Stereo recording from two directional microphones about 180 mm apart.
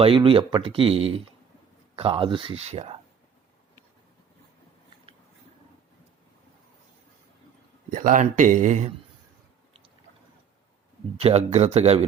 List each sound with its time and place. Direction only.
0.0 s speech: 30° right (ahead or behind)
7.9 s speech: 45° right (ahead or behind)
11.2 s speech: 35° right (ahead or behind)